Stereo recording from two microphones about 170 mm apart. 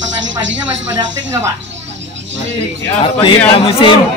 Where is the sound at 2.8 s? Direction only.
30° left (ahead or behind).